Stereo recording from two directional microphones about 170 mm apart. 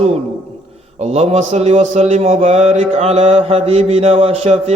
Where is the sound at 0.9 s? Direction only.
40° right (ahead or behind).